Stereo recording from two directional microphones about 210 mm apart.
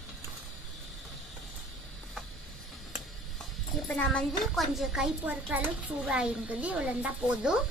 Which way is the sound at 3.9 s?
5° left (ahead or behind).